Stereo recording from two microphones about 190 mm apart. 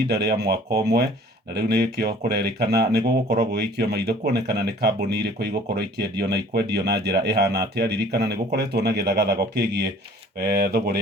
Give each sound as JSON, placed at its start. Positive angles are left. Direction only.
{"t": 0.1, "sound": "speech", "side_deg": -60}
{"t": 1.5, "sound": "speech", "side_deg": -60}